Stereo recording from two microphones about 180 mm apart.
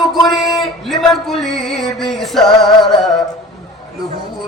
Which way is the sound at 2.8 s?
25° left (ahead or behind).